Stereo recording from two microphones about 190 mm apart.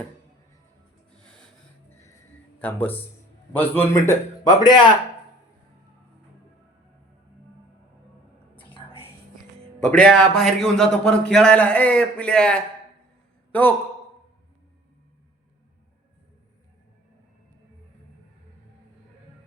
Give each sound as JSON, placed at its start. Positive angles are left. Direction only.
{"t": 2.6, "sound": "a man's voice", "side_deg": 10}
{"t": 8.5, "sound": "whispering", "side_deg": 30}
{"t": 9.9, "sound": "a man's voice", "side_deg": 5}